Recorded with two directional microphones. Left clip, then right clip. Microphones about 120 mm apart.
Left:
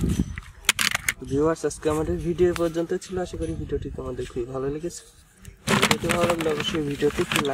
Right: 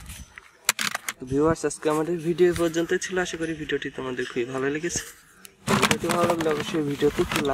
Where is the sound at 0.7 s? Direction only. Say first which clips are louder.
Left 5 dB; 10° left (ahead or behind).